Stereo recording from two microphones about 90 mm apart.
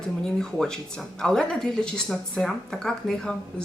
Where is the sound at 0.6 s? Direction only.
10° left (ahead or behind).